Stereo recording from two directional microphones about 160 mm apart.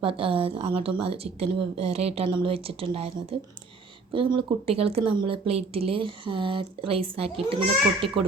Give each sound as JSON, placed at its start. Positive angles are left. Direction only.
{"t": 0.0, "sound": "speech", "side_deg": -35}